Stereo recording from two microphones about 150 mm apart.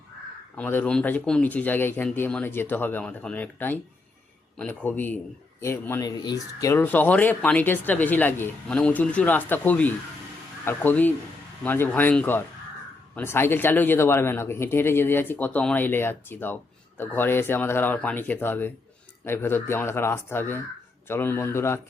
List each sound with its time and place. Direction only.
0.5 s speech: 10° left (ahead or behind)
6.1 s speech: 25° left (ahead or behind)